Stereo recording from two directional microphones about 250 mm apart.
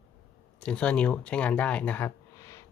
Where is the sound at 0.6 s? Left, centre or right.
Centre.